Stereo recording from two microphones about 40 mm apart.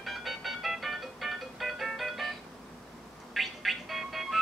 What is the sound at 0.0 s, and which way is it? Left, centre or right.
Music, centre.